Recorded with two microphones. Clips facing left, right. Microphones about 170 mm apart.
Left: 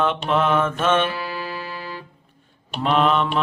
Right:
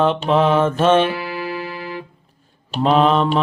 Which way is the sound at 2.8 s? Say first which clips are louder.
Right 4 dB; 35° right (ahead or behind).